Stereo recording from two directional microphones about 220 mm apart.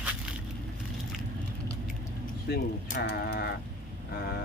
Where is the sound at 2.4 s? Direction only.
45° left (ahead or behind).